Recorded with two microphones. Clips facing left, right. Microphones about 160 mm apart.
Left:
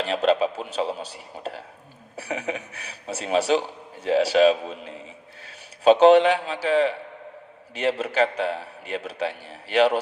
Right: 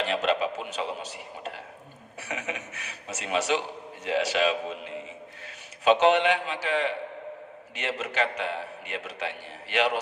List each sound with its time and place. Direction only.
0.0 s a man's voice: 35° left (ahead or behind)